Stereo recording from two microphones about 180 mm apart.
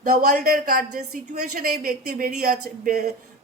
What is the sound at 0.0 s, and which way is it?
A man's voice, 55° right (ahead or behind).